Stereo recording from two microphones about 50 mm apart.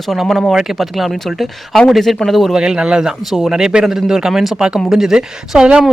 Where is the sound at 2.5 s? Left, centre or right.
Centre.